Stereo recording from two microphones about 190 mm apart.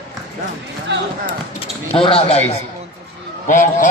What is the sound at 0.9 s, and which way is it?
Chop, 70° right (ahead or behind).